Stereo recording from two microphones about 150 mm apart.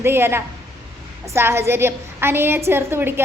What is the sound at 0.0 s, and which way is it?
A woman's voice, 15° right (ahead or behind).